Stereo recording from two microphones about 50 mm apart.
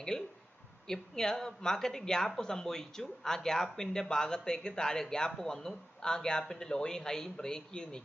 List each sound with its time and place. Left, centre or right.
0.1 s speech: centre